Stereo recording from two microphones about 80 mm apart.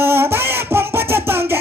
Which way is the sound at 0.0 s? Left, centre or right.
Right.